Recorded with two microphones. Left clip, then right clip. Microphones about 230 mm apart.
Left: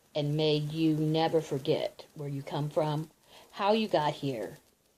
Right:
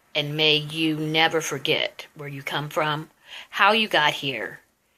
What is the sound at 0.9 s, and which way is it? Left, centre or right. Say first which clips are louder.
Speech: right 8 dB; centre.